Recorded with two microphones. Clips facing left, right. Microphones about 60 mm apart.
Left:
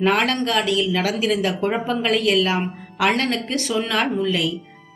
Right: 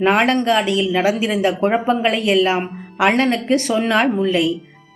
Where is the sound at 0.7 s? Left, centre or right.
Centre.